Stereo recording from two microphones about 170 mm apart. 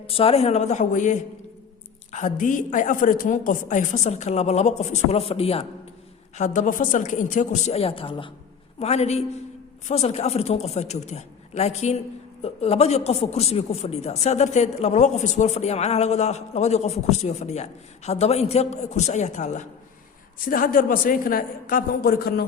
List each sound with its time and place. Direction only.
0.1 s a woman's voice: 35° left (ahead or behind)
20.5 s a man's voice: 55° left (ahead or behind)